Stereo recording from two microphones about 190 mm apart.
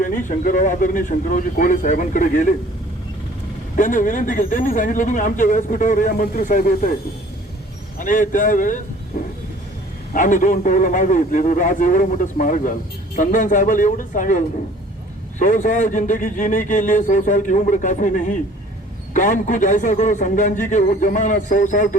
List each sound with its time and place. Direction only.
0.0 s speech: 45° left (ahead or behind)
3.8 s speech: 45° left (ahead or behind)
7.9 s a man's voice: 45° left (ahead or behind)